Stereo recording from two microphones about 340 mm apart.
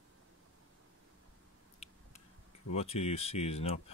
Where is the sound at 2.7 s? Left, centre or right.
Centre.